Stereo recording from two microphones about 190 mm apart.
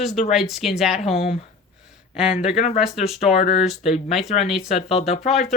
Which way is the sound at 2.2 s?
35° left (ahead or behind).